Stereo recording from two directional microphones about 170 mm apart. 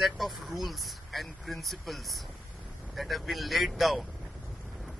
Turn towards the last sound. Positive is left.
turn(degrees=0)  # may be behind; listen again after turning